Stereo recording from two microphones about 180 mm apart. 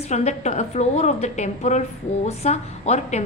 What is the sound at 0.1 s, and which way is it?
A woman's voice, 40° left (ahead or behind).